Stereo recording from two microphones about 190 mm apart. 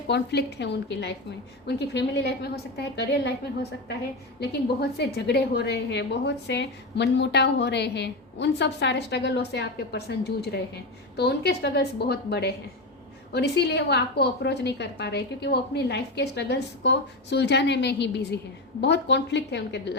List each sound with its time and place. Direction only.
0.1 s a woman's voice: 65° left (ahead or behind)